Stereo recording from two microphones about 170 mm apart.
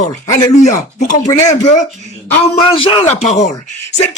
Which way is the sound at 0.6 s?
50° left (ahead or behind).